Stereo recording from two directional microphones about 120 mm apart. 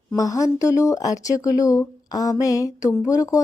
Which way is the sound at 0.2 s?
30° left (ahead or behind).